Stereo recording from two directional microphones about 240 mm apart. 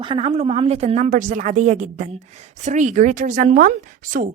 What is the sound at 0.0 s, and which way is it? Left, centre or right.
A woman's voice, right.